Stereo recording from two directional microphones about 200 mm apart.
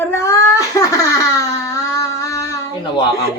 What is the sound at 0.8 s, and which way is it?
Laughter, 15° left (ahead or behind).